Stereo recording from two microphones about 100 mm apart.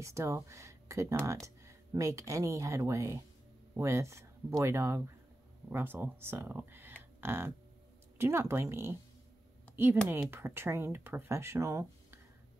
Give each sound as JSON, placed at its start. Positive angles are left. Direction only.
{"t": 0.0, "sound": "speech", "side_deg": -30}
{"t": 10.3, "sound": "speech", "side_deg": -25}